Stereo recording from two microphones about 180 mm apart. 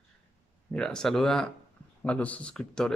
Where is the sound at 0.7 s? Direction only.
5° left (ahead or behind).